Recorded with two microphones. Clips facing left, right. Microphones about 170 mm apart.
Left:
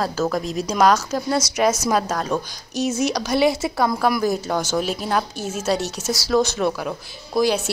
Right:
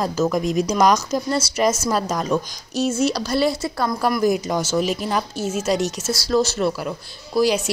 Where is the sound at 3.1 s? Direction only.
15° left (ahead or behind).